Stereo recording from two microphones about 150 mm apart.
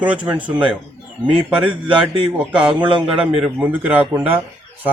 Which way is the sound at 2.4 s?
5° right (ahead or behind).